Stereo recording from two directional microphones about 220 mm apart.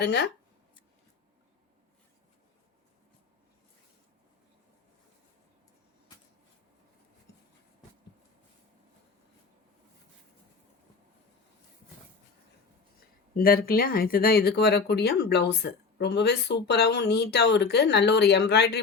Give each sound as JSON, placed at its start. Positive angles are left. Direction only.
{"t": 0.0, "sound": "speech", "side_deg": 50}
{"t": 13.3, "sound": "speech", "side_deg": 40}